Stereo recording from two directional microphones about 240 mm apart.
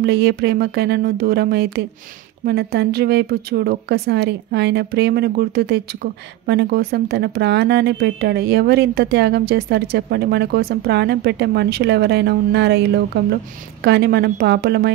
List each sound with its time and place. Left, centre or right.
0.0 s speech: right